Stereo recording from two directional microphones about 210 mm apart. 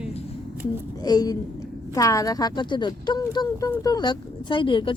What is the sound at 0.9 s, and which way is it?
A woman's voice, 20° left (ahead or behind).